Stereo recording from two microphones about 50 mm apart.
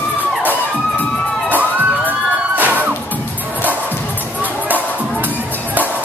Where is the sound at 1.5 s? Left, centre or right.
Right.